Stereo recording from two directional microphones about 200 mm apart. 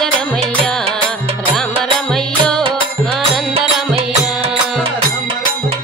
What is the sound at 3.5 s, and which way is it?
Music, 30° right (ahead or behind).